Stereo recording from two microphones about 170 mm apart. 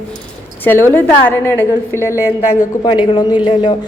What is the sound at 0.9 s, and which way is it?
A woman's voice, 10° left (ahead or behind).